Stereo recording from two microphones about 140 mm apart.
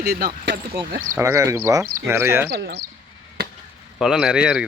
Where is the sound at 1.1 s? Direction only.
20° right (ahead or behind).